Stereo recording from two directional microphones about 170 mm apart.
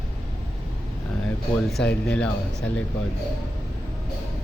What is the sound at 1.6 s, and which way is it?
Speech, 5° left (ahead or behind).